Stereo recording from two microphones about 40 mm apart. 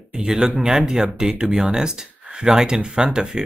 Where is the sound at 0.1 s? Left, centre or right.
Centre.